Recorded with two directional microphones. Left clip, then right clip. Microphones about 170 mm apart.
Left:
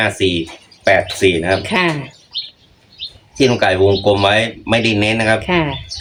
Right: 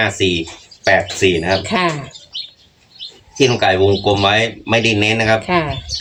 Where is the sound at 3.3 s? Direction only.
10° left (ahead or behind).